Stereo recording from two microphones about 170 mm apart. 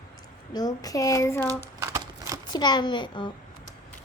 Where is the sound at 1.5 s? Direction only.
20° right (ahead or behind).